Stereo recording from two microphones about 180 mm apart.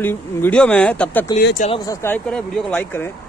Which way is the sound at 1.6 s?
25° left (ahead or behind).